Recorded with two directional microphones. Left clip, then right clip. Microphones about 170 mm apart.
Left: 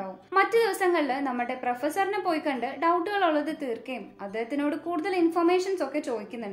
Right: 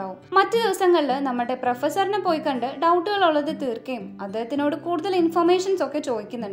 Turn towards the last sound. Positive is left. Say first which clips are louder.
# right 5 dB
turn(degrees=-35)  # may be behind; listen again after turning